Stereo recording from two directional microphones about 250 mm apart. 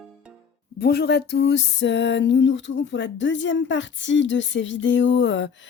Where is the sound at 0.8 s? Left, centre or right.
Left.